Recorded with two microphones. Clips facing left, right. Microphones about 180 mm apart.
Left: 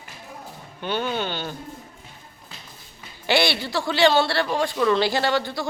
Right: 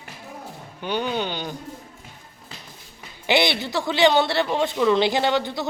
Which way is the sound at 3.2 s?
20° right (ahead or behind).